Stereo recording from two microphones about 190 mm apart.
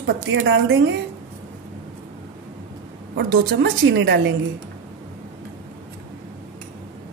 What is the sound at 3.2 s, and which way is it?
A woman's voice, 65° right (ahead or behind).